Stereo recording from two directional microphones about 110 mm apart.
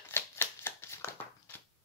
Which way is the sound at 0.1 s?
20° left (ahead or behind).